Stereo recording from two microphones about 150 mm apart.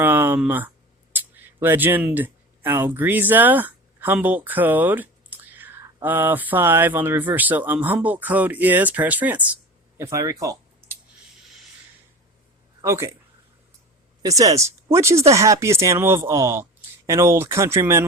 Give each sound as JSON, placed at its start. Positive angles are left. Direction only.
{"t": 0.0, "sound": "a sound", "side_deg": -15}
{"t": 1.1, "sound": "speech", "side_deg": -15}
{"t": 10.0, "sound": "speech", "side_deg": -20}
{"t": 12.8, "sound": "speech", "side_deg": -20}
{"t": 14.2, "sound": "speech", "side_deg": -25}